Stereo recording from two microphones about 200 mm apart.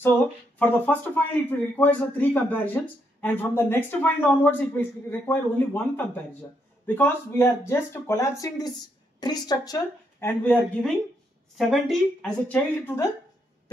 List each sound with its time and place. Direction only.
0.6 s a man's voice: 10° left (ahead or behind)
10.2 s a man's voice: 10° left (ahead or behind)